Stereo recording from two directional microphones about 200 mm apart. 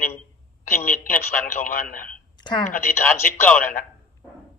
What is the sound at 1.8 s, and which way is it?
Speech, 40° left (ahead or behind).